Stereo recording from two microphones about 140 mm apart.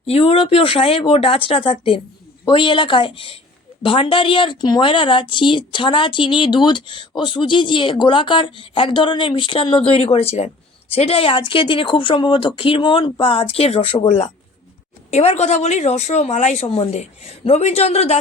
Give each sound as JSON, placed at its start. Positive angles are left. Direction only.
{"t": 0.0, "sound": "a woman's voice", "side_deg": 45}
{"t": 15.1, "sound": "speech", "side_deg": 50}